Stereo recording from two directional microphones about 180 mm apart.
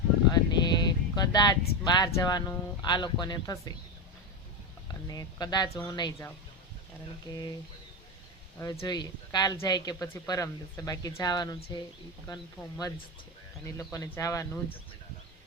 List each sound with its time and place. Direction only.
0.3 s speech: 25° left (ahead or behind)
5.0 s speech: 20° left (ahead or behind)
7.3 s speech: 25° left (ahead or behind)
8.5 s speech: 20° left (ahead or behind)
13.7 s speech: 20° left (ahead or behind)